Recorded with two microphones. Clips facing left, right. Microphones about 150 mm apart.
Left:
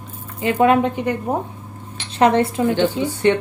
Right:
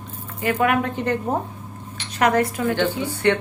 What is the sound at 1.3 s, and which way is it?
Speech, 10° left (ahead or behind).